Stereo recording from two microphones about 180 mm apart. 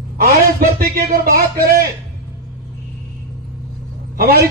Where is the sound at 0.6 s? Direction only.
55° right (ahead or behind).